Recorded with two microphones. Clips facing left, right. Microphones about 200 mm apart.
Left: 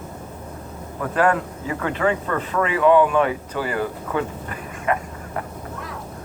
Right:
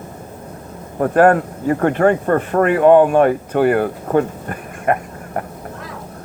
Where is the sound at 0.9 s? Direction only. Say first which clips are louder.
Right 8 dB; 50° right (ahead or behind).